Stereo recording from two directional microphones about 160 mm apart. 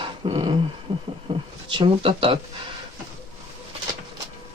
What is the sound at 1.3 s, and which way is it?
Speech, 30° right (ahead or behind).